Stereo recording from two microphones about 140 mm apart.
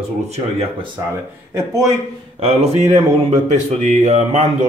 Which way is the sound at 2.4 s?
50° right (ahead or behind).